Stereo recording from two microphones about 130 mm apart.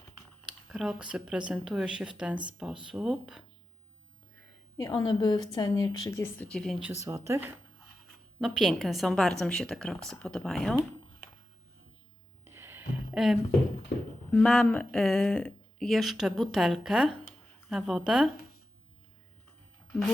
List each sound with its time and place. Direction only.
0.4 s speech: 5° right (ahead or behind)
4.9 s a woman's voice: 35° left (ahead or behind); by 6.8 s 5° left (ahead or behind)
7.0 s speech: 20° right (ahead or behind)
8.4 s speech: 5° right (ahead or behind)
12.5 s a sound: 20° right (ahead or behind)
13.1 s speech: 5° right (ahead or behind)
14.3 s speech: 5° left (ahead or behind)